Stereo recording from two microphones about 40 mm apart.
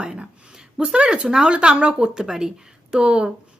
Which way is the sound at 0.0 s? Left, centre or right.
Right.